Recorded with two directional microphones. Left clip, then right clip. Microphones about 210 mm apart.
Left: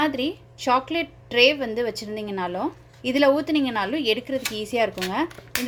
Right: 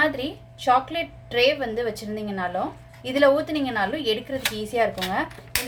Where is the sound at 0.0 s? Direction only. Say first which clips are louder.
Right 1 dB; 35° left (ahead or behind).